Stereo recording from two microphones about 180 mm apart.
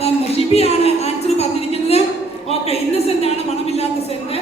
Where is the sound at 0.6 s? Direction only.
35° left (ahead or behind).